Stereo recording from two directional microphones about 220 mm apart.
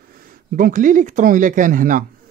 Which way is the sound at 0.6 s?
40° right (ahead or behind).